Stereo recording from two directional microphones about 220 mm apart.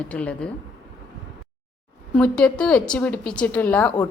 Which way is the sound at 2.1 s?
5° left (ahead or behind).